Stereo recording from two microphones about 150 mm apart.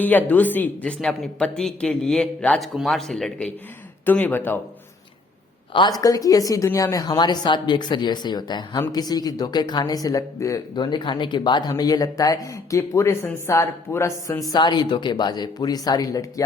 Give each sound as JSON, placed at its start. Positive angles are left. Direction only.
{"t": 0.0, "sound": "speech", "side_deg": 10}
{"t": 6.0, "sound": "speech", "side_deg": 25}